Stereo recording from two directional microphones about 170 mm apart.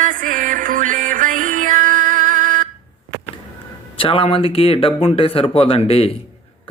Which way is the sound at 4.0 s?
30° left (ahead or behind).